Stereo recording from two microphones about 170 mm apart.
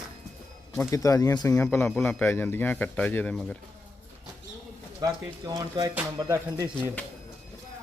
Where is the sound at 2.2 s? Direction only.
15° left (ahead or behind).